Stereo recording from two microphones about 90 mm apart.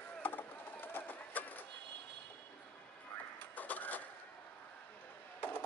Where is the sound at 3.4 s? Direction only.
20° left (ahead or behind).